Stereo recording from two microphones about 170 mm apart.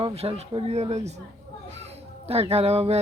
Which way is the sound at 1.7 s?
40° right (ahead or behind).